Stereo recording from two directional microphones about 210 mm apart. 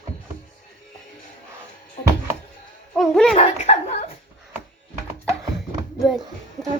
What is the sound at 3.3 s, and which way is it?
Speech, 30° left (ahead or behind).